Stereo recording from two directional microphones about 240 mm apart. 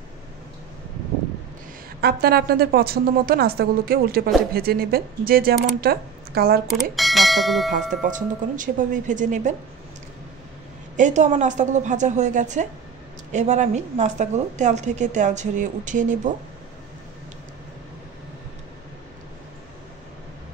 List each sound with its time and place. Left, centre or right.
2.0 s a woman's voice: right
6.7 s speech: centre
7.9 s a woman's voice: right
11.0 s a woman's voice: right